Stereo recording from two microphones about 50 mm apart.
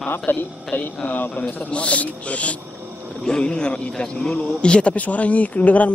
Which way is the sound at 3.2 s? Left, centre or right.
Centre.